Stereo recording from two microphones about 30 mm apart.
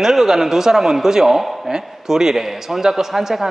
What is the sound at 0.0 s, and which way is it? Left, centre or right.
A man's voice, centre.